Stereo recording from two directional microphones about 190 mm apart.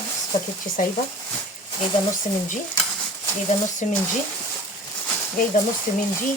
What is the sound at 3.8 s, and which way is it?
Speech, 40° left (ahead or behind).